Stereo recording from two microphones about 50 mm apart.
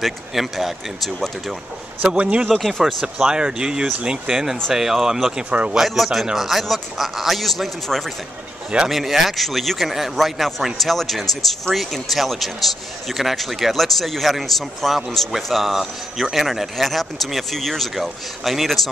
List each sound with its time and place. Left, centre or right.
0.0 s a man's voice: centre
2.1 s speech: right
3.0 s a man's voice: centre
3.3 s speech: centre
5.5 s speech: right
5.8 s a man's voice: centre